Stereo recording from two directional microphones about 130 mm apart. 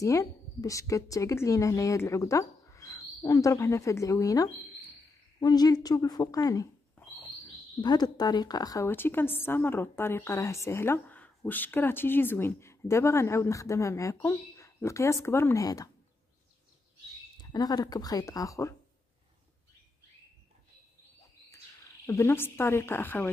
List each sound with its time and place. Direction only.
0.0 s a woman's voice: 25° left (ahead or behind)
7.8 s a woman's voice: 35° left (ahead or behind)
17.4 s a woman's voice: 30° left (ahead or behind)
22.0 s speech: 20° left (ahead or behind)